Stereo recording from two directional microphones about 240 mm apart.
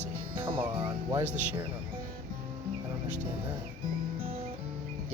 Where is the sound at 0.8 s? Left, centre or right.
Right.